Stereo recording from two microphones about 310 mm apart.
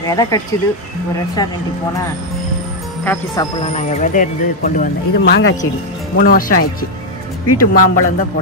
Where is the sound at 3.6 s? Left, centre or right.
Left.